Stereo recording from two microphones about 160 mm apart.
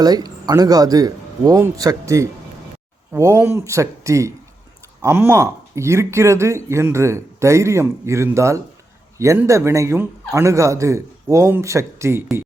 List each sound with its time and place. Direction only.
0.0 s speech: 25° right (ahead or behind)